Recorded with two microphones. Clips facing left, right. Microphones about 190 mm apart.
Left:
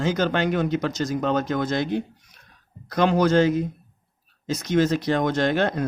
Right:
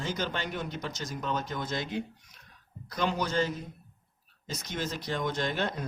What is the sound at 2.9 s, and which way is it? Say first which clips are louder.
Speech: left 11 dB; 90° left.